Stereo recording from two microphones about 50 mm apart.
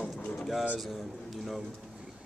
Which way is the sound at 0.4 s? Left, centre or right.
Centre.